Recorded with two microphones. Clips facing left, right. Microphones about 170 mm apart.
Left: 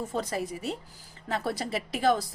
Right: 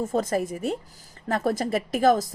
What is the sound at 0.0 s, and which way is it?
Speech, 45° right (ahead or behind).